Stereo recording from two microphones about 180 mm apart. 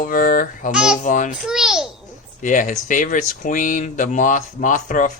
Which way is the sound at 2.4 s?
45° left (ahead or behind).